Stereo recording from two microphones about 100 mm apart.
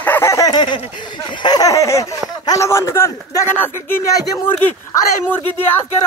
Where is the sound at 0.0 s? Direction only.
20° left (ahead or behind).